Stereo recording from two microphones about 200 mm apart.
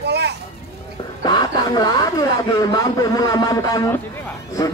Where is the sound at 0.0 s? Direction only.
55° right (ahead or behind).